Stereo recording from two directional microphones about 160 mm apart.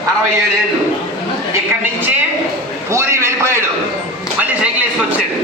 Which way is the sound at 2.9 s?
15° right (ahead or behind).